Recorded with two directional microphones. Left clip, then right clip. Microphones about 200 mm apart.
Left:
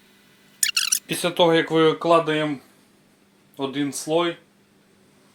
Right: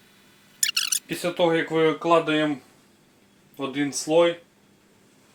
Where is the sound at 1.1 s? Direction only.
40° left (ahead or behind).